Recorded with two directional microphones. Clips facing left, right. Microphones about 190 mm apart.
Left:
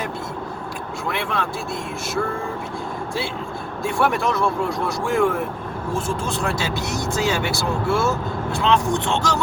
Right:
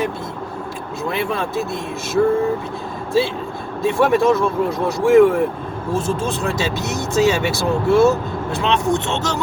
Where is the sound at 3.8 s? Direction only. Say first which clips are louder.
Right 6 dB; 20° right (ahead or behind).